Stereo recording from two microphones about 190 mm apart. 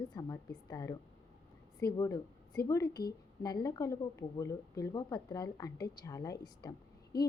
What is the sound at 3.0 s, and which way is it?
Speech, 55° left (ahead or behind).